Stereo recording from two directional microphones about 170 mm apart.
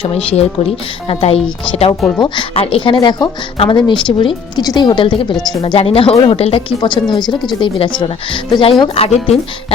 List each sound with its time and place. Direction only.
1.0 s speech: 35° left (ahead or behind)
2.1 s speech: 25° left (ahead or behind)